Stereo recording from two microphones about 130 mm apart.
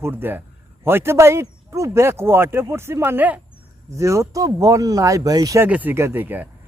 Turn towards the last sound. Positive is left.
turn(degrees=-15)  # may be behind; listen again after turning